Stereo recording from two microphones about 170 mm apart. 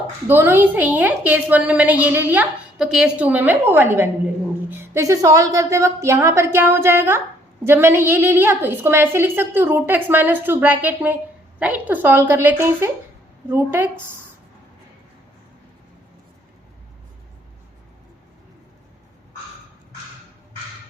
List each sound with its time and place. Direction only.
0.3 s a woman's voice: 10° right (ahead or behind)